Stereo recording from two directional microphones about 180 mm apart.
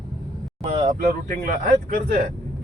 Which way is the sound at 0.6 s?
35° right (ahead or behind).